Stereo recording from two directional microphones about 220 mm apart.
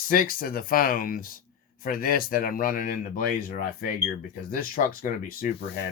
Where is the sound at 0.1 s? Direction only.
40° left (ahead or behind).